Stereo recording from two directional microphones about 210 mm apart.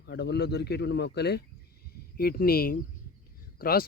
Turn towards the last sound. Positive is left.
turn(degrees=45)  # may be behind; listen again after turning